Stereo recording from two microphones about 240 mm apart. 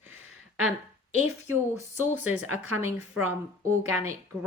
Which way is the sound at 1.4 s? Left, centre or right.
Centre.